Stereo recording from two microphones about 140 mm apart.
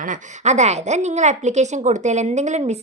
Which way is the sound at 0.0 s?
65° right (ahead or behind).